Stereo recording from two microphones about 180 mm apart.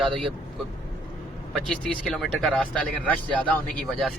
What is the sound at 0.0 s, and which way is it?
Speech, centre (ahead or behind).